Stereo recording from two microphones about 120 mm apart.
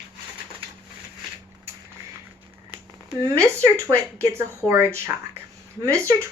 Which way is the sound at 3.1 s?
25° right (ahead or behind).